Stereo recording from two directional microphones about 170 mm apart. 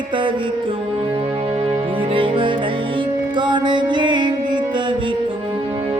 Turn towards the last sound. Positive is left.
turn(degrees=-25)  # may be behind; listen again after turning